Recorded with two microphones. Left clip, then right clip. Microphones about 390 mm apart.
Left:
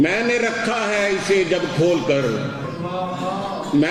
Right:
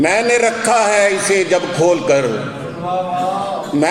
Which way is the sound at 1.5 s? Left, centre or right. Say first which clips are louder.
Right 5 dB; right.